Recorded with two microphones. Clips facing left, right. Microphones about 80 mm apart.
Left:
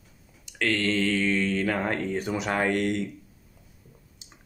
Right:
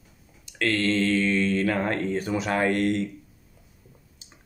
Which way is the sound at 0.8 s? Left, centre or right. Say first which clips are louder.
Right 4 dB; left.